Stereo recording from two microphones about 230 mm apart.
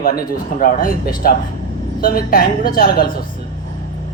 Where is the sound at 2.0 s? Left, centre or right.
Left.